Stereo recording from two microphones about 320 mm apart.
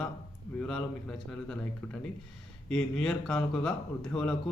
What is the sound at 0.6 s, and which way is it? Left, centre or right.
Speech, centre.